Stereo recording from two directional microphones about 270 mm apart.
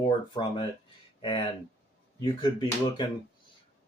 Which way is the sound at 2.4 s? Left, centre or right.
Centre.